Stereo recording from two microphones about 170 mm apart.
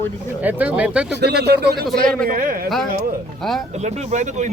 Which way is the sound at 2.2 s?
55° right (ahead or behind).